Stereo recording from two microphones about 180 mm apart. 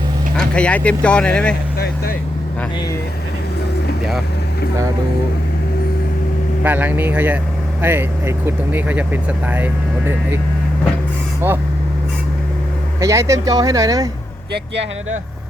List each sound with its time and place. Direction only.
0.3 s speech: 5° left (ahead or behind)
6.6 s speech: 10° right (ahead or behind)
10.1 s speech: 10° right (ahead or behind)
11.4 s speech: 10° right (ahead or behind)
13.0 s speech: 15° right (ahead or behind)